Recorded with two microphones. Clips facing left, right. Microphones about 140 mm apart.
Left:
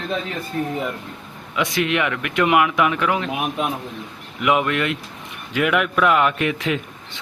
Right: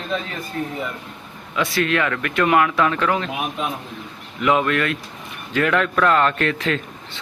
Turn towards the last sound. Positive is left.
turn(degrees=10)  # may be behind; listen again after turning